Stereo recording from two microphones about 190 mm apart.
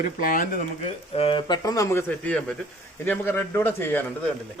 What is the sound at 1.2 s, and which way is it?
A man's voice, 25° left (ahead or behind).